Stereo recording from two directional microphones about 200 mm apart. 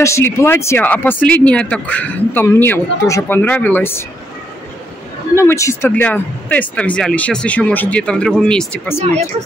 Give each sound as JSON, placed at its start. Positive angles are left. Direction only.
{"t": 0.0, "sound": "speech", "side_deg": 15}
{"t": 5.3, "sound": "speech", "side_deg": 15}